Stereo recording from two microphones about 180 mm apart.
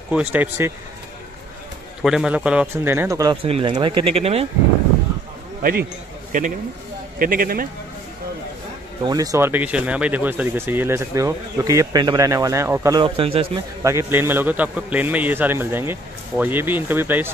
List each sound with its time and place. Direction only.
0.1 s speech: 10° right (ahead or behind)
2.0 s speech: 5° right (ahead or behind)
3.4 s speech: 30° right (ahead or behind)
5.6 s a man's voice: 55° right (ahead or behind)
9.0 s speech: 20° right (ahead or behind)
13.0 s speech: 30° right (ahead or behind)
13.8 s speech: 15° right (ahead or behind)